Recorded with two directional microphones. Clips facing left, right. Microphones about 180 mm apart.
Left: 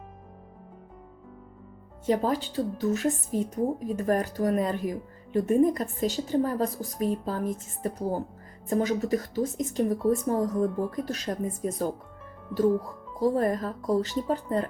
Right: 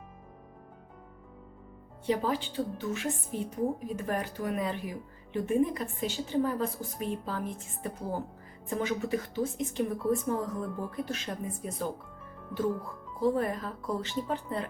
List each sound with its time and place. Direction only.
2.0 s a woman's voice: 40° left (ahead or behind)